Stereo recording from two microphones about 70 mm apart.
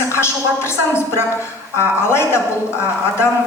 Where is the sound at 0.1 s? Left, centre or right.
Left.